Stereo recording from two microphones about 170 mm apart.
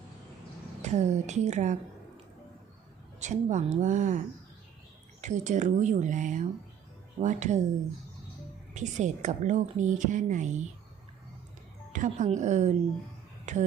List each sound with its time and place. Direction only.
0.8 s a woman's voice: 45° right (ahead or behind)
3.2 s a woman's voice: 45° right (ahead or behind)
5.2 s a woman's voice: 45° right (ahead or behind)
8.7 s a woman's voice: 45° right (ahead or behind)
11.9 s a woman's voice: 45° right (ahead or behind)